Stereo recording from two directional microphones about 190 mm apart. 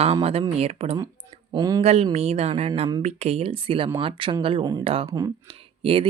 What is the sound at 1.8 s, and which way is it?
Speech, 35° right (ahead or behind).